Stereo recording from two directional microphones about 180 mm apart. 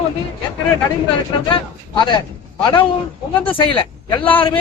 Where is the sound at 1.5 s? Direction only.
25° left (ahead or behind).